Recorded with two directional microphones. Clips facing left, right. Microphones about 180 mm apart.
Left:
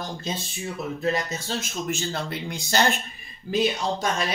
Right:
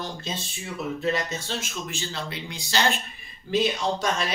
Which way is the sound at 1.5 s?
45° left (ahead or behind).